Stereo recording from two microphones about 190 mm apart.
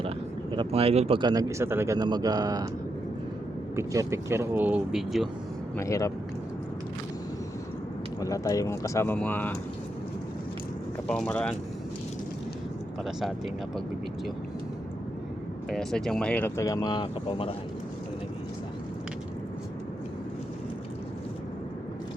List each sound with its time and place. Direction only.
0.5 s speech: 25° right (ahead or behind)
3.8 s speech: 15° right (ahead or behind)
5.7 s speech: 15° left (ahead or behind)
8.2 s speech: 15° left (ahead or behind)
11.1 s speech: 5° left (ahead or behind)
13.1 s speech: centre (ahead or behind)
15.7 s speech: centre (ahead or behind); by 17.5 s 30° left (ahead or behind)